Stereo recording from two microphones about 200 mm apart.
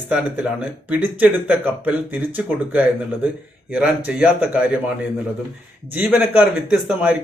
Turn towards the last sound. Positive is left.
turn(degrees=-5)  # may be behind; listen again after turning